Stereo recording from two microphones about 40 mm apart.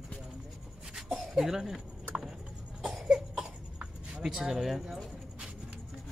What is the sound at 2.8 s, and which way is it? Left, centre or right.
Cough, centre.